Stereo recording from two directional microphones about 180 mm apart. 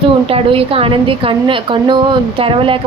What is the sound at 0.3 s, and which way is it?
A woman's voice, 30° right (ahead or behind).